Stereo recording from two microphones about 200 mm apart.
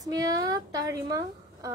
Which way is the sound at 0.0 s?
20° right (ahead or behind).